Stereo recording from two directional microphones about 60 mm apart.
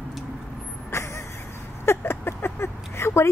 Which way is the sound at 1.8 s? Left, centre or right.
Left.